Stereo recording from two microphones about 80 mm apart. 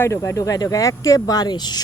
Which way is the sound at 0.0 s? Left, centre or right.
Left.